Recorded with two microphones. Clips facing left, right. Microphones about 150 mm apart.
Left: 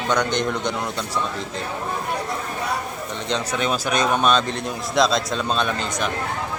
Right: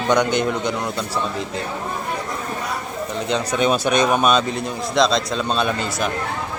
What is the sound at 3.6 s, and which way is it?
Speech, 20° right (ahead or behind).